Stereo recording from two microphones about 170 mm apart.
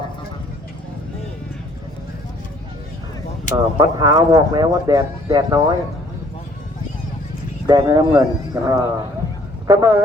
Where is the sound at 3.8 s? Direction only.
25° right (ahead or behind).